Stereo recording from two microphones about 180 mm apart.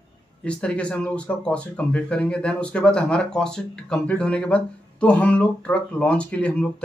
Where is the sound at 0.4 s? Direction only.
5° left (ahead or behind).